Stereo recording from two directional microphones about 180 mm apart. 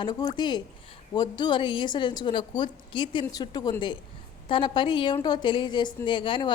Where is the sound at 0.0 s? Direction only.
20° left (ahead or behind).